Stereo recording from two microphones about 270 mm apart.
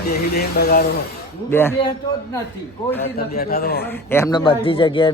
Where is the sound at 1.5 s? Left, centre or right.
Centre.